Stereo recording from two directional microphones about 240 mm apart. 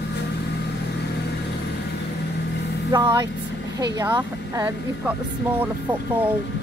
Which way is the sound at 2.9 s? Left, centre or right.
Centre.